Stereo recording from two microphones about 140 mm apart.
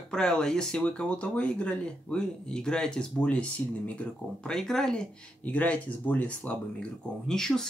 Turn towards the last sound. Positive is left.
turn(degrees=5)  # may be behind; listen again after turning